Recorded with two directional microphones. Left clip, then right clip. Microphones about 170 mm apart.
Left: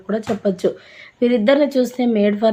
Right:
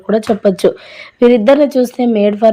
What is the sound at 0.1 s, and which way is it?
A woman's voice, 45° right (ahead or behind).